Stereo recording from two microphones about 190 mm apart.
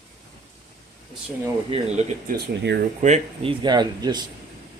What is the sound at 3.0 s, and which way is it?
Speech, 35° right (ahead or behind).